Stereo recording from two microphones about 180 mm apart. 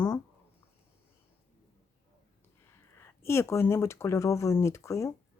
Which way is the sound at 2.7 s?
10° left (ahead or behind).